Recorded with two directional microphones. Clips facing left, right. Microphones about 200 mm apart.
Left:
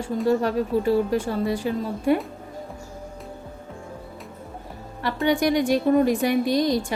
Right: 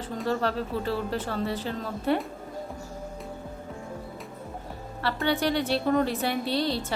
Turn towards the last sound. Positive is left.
turn(degrees=15)  # may be behind; listen again after turning